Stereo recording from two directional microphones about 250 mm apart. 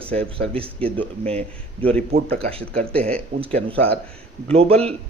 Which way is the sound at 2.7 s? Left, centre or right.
Centre.